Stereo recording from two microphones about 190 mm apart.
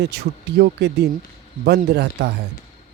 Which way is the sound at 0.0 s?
60° right (ahead or behind).